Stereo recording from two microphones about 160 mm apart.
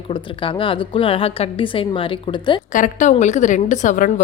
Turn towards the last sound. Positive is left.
turn(degrees=55)  # may be behind; listen again after turning